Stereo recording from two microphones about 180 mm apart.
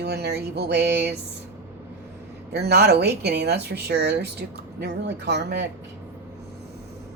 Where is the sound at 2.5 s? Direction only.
65° right (ahead or behind).